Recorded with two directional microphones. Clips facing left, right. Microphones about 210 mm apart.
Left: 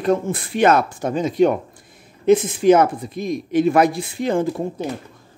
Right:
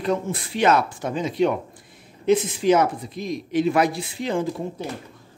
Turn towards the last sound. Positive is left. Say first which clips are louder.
# left 4 dB
turn(degrees=50)  # may be behind; listen again after turning